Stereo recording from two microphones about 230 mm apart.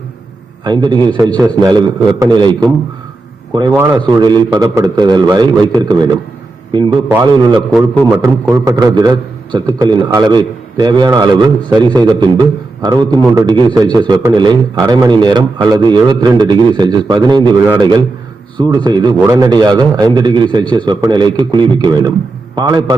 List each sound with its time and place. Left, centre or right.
0.6 s a man's voice: centre
6.7 s a man's voice: centre